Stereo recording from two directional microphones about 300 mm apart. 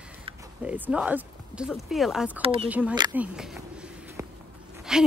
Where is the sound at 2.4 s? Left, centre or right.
Centre.